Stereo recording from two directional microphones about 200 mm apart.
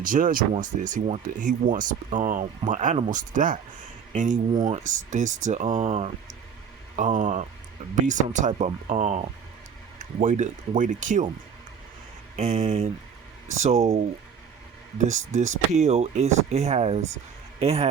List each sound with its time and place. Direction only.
0.0 s speech: 40° right (ahead or behind)
4.5 s speech: 20° right (ahead or behind)
4.8 s speech: 40° right (ahead or behind)
12.4 s speech: 35° right (ahead or behind)
14.9 s speech: 35° right (ahead or behind)